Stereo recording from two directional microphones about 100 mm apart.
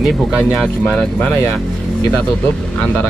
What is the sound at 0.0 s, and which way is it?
Speech, centre (ahead or behind).